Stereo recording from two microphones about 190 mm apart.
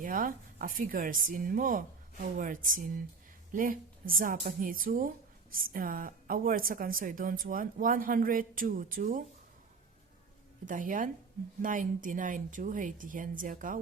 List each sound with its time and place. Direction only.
0.0 s a woman's voice: 45° right (ahead or behind)
10.7 s a woman's voice: 45° right (ahead or behind)